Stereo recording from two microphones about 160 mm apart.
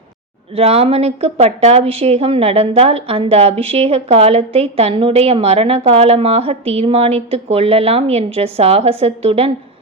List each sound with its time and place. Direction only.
0.5 s a woman's voice: 40° right (ahead or behind)